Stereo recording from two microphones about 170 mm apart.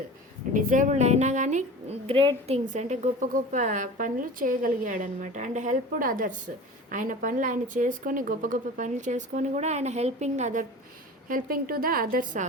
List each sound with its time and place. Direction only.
0.5 s speech: 50° right (ahead or behind)
2.0 s a woman's voice: 35° right (ahead or behind)
2.6 s a woman's voice: 45° right (ahead or behind)